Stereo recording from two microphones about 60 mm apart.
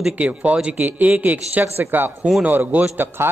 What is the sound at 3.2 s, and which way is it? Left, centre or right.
Speech, right.